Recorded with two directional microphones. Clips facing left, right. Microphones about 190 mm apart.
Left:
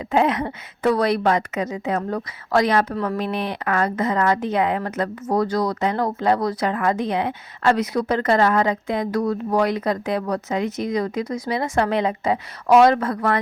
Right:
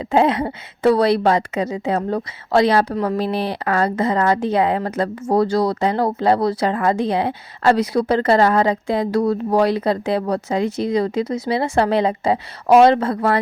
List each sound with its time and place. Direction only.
0.0 s speech: 30° right (ahead or behind)